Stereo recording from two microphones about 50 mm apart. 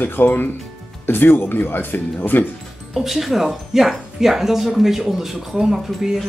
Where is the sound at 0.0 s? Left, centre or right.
Left.